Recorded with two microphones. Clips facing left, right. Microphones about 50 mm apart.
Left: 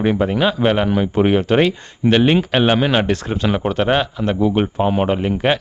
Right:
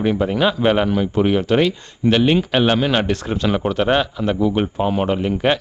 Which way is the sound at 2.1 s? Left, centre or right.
Centre.